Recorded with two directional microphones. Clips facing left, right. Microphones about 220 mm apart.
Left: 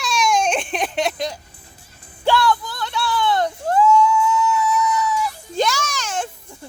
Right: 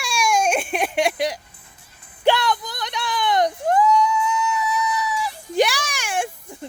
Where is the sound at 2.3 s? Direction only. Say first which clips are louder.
Left 1 dB; 20° right (ahead or behind).